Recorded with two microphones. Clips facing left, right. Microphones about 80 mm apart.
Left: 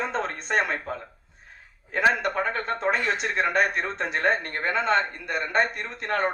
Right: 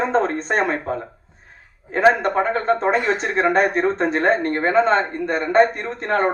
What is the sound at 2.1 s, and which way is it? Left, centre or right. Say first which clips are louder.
A woman's voice: right 7 dB; right.